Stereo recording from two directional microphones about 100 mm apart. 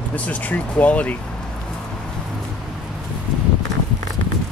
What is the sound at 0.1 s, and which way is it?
Speech, 15° left (ahead or behind).